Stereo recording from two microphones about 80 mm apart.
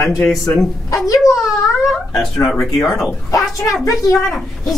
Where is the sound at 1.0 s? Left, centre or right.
Left.